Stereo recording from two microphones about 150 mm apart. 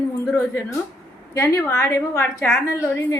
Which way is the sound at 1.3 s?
15° left (ahead or behind).